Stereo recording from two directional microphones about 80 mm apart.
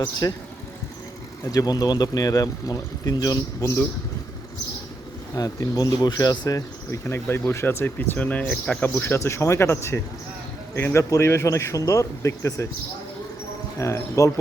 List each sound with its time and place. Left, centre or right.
0.0 s speech: left
1.5 s speech: left
5.3 s speech: left
7.1 s speech: left; by 8.8 s centre
8.8 s speech: left
9.1 s speech: left
13.7 s speech: left